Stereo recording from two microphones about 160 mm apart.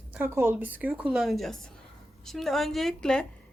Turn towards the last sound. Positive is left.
turn(degrees=5)  # may be behind; listen again after turning